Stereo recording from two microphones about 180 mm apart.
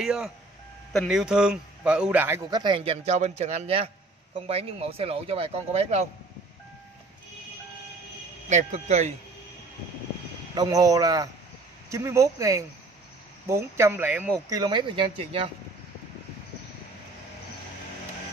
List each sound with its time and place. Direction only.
0.0 s speech: 5° right (ahead or behind)
2.6 s speech: 30° right (ahead or behind)
8.5 s speech: 40° right (ahead or behind)
10.5 s speech: 20° right (ahead or behind)
14.6 s speech: 25° right (ahead or behind)